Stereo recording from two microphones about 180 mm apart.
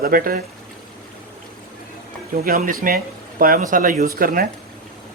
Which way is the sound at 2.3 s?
55° right (ahead or behind).